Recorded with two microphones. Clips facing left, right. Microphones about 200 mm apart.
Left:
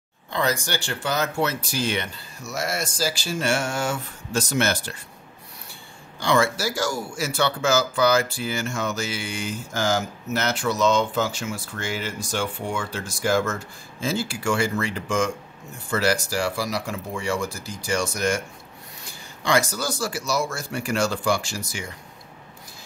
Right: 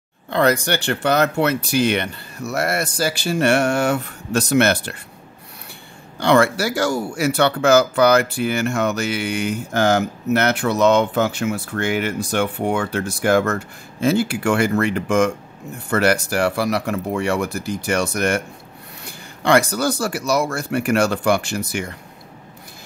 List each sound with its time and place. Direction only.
0.3 s speech: 60° right (ahead or behind)
6.1 s speech: 60° right (ahead or behind)